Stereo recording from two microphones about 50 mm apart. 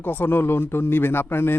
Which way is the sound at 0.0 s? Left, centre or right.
Left.